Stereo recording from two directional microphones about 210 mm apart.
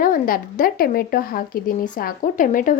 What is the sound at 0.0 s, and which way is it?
Speech, 40° left (ahead or behind).